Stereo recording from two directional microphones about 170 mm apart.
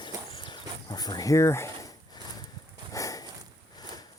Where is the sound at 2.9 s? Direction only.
20° left (ahead or behind).